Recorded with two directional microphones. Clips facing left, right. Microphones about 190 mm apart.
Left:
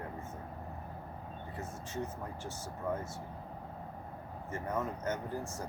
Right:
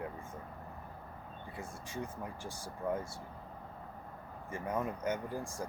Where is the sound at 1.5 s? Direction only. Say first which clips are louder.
Left 2 dB; 15° right (ahead or behind).